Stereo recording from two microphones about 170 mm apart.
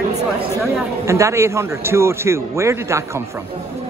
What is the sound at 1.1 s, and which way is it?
Speech, 15° right (ahead or behind).